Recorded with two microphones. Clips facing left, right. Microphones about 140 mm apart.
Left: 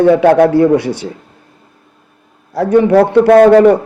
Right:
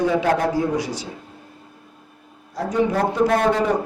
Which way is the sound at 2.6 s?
65° left (ahead or behind).